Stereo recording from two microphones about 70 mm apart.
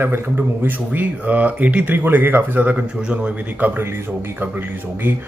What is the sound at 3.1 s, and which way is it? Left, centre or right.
Speech, centre.